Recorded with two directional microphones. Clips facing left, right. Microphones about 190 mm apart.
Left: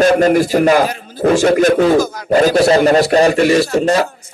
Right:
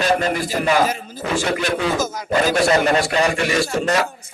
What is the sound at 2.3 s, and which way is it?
Speech, 40° left (ahead or behind).